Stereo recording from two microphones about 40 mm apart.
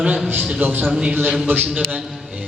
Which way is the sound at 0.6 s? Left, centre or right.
Right.